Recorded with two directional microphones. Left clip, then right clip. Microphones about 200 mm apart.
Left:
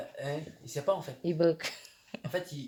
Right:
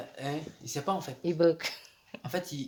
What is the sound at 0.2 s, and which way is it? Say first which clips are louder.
Speech: right 2 dB; 55° right (ahead or behind).